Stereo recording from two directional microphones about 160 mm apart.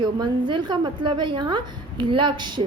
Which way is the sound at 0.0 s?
30° right (ahead or behind).